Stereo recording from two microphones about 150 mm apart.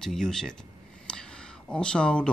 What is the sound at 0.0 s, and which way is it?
Speech, 5° left (ahead or behind).